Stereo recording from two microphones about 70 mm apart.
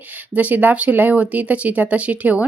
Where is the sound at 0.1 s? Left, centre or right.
Right.